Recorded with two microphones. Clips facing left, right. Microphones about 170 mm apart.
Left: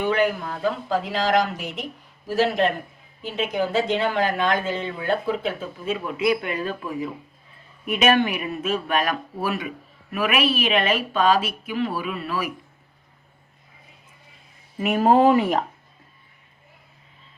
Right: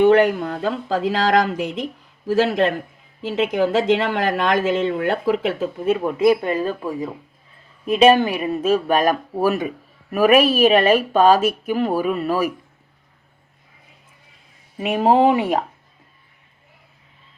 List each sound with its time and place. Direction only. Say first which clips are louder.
0.6 s a woman's voice: right 1 dB; 90° right; by 6.1 s 55° right (ahead or behind)
6.1 s speech: right 5 dB; 35° right (ahead or behind)
14.8 s speech: right 1 dB; 20° right (ahead or behind)